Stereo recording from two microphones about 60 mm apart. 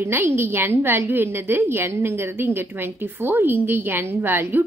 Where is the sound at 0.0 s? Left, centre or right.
Right.